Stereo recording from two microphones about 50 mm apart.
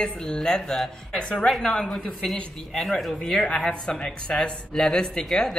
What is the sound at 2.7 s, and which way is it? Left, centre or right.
Speech, centre.